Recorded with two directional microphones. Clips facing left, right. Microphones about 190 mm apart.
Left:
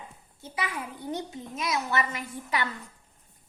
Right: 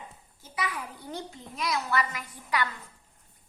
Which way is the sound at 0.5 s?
25° left (ahead or behind).